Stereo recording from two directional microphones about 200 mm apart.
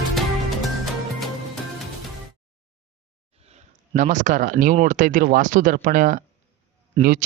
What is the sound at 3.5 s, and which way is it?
Speech, 40° right (ahead or behind).